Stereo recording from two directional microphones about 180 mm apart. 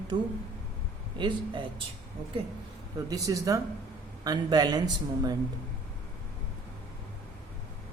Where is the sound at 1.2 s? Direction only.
25° right (ahead or behind).